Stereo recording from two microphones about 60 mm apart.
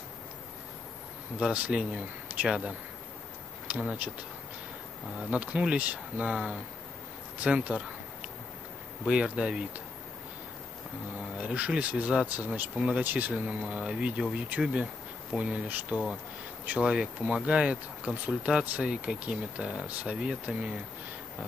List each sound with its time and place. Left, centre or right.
1.5 s speech: centre
5.3 s speech: right
9.0 s speech: centre
11.3 s speech: right
15.3 s speech: right